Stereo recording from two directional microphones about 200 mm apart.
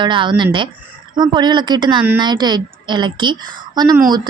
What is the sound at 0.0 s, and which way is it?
Speech, 25° right (ahead or behind).